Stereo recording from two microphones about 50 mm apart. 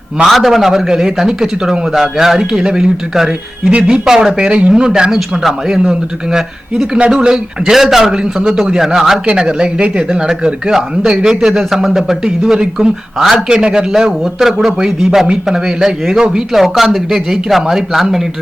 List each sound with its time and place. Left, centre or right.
0.3 s a man's voice: centre; by 4.0 s right
4.0 s a man's voice: centre
7.7 s a man's voice: centre
9.2 s a man's voice: centre
13.9 s a man's voice: centre
16.6 s speech: centre